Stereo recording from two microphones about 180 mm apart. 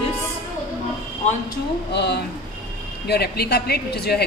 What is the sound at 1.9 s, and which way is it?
A woman's voice, 70° left (ahead or behind).